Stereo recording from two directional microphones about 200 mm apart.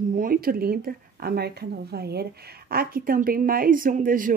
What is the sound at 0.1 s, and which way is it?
A woman's voice, 45° right (ahead or behind).